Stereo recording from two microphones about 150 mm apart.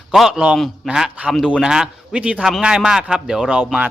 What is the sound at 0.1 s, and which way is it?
A man's voice, 5° right (ahead or behind).